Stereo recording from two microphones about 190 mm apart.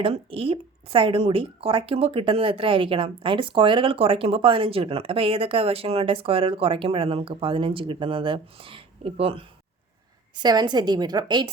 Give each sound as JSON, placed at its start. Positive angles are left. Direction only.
{"t": 0.0, "sound": "speech", "side_deg": -30}